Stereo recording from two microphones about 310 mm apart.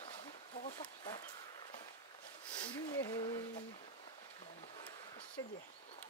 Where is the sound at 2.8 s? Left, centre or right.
Centre.